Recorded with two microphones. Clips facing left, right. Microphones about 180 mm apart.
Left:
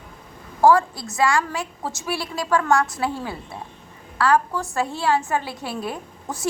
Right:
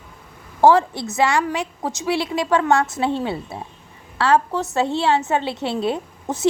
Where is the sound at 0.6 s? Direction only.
25° right (ahead or behind).